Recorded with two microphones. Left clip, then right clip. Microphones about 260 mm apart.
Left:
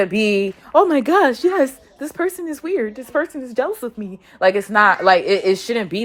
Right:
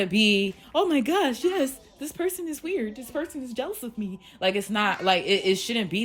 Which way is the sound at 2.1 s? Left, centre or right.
Centre.